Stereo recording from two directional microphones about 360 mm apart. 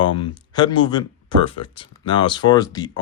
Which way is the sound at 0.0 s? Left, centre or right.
Centre.